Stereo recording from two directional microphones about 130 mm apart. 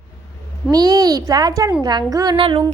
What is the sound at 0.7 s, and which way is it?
A child's voice, 30° right (ahead or behind).